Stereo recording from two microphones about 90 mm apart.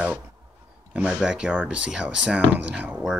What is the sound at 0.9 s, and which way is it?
Speech, 10° right (ahead or behind).